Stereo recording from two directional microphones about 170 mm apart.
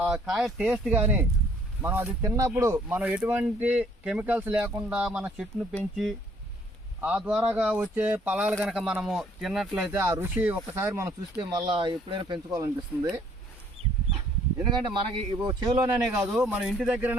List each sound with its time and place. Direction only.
0.0 s speech: centre (ahead or behind)
7.0 s speech: 5° right (ahead or behind)
13.8 s chicken: 40° right (ahead or behind)
14.6 s speech: 25° right (ahead or behind)
16.3 s speech: 10° right (ahead or behind)